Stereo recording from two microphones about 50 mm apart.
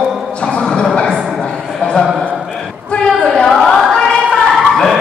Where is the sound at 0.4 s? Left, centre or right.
Left.